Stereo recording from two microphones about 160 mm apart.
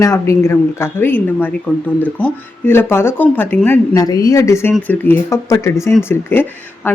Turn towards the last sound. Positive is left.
turn(degrees=15)  # may be behind; listen again after turning